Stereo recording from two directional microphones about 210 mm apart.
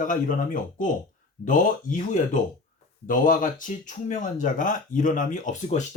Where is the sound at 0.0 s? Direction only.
40° left (ahead or behind).